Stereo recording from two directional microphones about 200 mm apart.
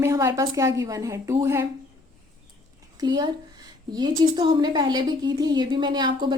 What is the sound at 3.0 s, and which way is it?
A woman's voice, 20° right (ahead or behind).